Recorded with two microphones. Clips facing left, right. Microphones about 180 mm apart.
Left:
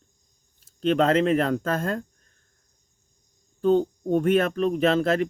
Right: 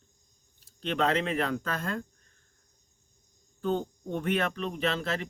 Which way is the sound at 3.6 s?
40° left (ahead or behind).